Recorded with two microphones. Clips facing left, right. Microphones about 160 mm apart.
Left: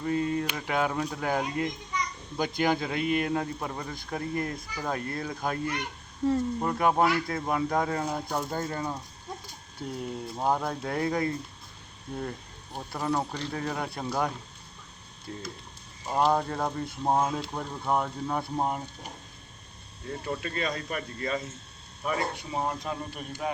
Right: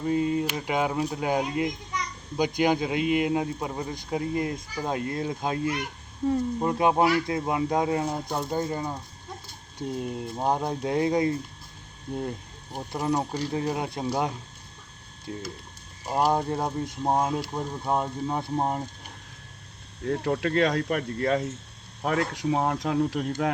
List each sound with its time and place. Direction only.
0.0 s speech: 10° right (ahead or behind)
5.8 s speech: 10° right (ahead or behind)
12.7 s speech: 15° right (ahead or behind)
16.0 s speech: 15° right (ahead or behind)
20.1 s speech: 70° right (ahead or behind)
22.0 s speech: 75° right (ahead or behind); by 23.3 s 90° right